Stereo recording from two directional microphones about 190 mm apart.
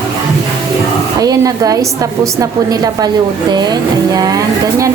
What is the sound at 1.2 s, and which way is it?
Speech, 20° right (ahead or behind).